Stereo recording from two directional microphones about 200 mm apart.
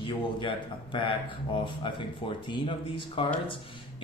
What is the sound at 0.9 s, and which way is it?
Speech, 25° left (ahead or behind).